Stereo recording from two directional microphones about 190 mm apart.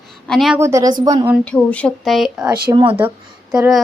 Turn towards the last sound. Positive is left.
turn(degrees=-5)  # may be behind; listen again after turning